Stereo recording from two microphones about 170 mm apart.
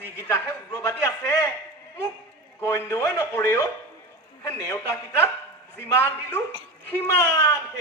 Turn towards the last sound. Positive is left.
turn(degrees=15)  # may be behind; listen again after turning